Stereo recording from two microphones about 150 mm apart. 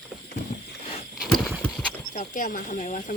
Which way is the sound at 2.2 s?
60° left (ahead or behind).